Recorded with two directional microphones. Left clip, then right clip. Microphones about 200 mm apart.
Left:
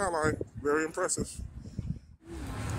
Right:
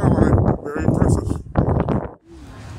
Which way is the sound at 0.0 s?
Centre (ahead or behind).